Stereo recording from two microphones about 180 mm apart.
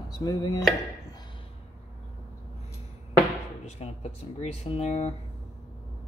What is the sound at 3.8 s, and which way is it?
Speech, 35° left (ahead or behind).